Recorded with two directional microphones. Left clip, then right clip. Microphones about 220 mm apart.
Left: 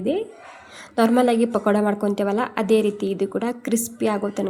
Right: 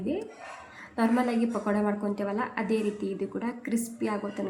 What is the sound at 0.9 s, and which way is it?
A woman's voice, 40° left (ahead or behind).